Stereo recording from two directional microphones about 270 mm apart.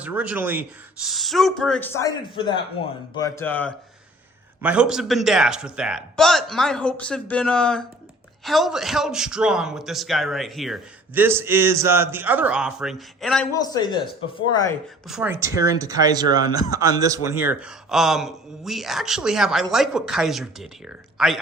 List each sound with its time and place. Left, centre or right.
0.0 s a man's voice: centre
13.5 s speech: centre
15.0 s a man's voice: centre